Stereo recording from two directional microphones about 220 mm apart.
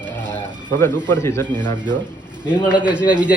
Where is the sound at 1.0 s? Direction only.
10° left (ahead or behind).